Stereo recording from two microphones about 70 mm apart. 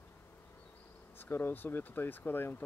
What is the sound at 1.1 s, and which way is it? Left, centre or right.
Speech, left.